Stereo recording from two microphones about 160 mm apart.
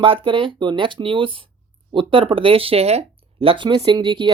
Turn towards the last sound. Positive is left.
turn(degrees=-30)  # may be behind; listen again after turning